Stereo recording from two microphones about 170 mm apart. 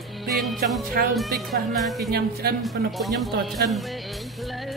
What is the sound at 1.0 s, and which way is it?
Speech, 65° right (ahead or behind).